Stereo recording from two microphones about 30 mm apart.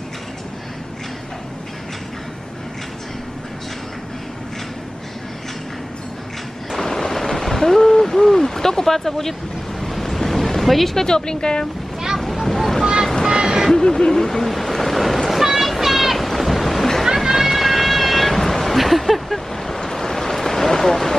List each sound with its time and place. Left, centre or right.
6.7 s a sound: centre
9.8 s waves: centre
11.0 s a woman's voice: left
12.2 s boat: centre
13.3 s vehicle: right
13.7 s speech: centre
14.5 s waves: centre
15.4 s a sound: centre
17.0 s a sound: centre